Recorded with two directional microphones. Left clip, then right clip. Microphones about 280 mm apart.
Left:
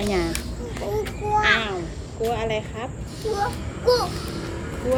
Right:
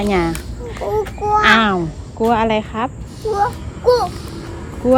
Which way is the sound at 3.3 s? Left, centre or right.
Centre.